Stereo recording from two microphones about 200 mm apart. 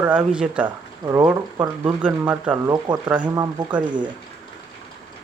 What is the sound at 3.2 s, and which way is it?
Speech, 20° right (ahead or behind).